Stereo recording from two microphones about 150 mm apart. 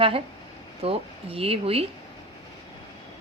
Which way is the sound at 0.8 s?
40° right (ahead or behind).